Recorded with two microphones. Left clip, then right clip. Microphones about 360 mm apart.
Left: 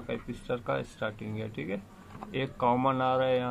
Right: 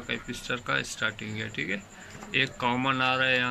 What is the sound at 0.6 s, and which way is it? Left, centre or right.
A man's voice, centre.